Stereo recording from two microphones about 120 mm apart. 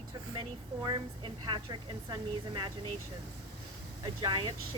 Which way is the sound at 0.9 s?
40° right (ahead or behind).